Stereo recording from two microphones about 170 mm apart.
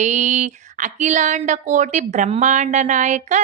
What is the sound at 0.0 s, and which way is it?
Speech, 45° right (ahead or behind).